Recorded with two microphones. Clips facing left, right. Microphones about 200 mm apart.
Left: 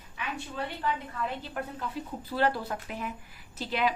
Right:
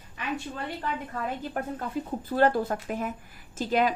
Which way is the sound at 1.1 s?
45° right (ahead or behind).